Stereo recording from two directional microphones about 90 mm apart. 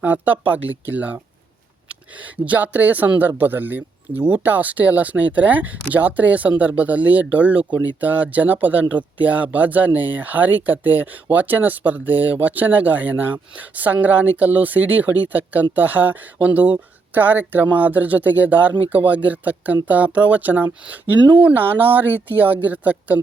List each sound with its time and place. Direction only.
0.0 s speech: 20° right (ahead or behind)
21.2 s speech: 55° right (ahead or behind)
21.4 s speech: 20° right (ahead or behind)